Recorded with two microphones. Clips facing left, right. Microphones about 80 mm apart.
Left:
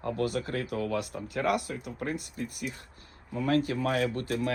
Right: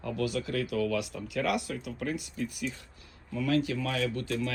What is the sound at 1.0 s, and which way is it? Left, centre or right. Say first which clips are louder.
Speech: left 1 dB; left.